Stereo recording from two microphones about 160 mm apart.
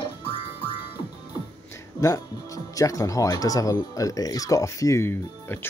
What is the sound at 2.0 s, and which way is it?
Speech, 20° left (ahead or behind).